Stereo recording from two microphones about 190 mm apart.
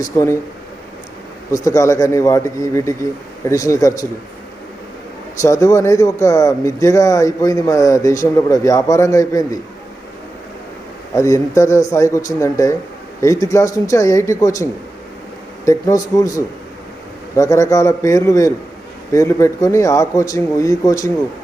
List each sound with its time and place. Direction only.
0.0 s speech: 15° left (ahead or behind)
1.5 s speech: 15° left (ahead or behind)
5.4 s speech: 15° left (ahead or behind)
11.1 s speech: 15° left (ahead or behind)